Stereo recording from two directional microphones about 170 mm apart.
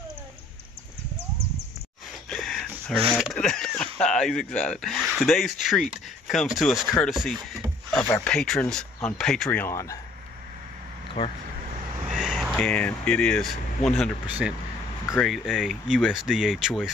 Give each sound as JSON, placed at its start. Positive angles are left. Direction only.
{"t": 2.2, "sound": "a sound", "side_deg": 0}
{"t": 3.1, "sound": "speech", "side_deg": 0}
{"t": 11.2, "sound": "speech", "side_deg": 25}
{"t": 12.1, "sound": "speech", "side_deg": 0}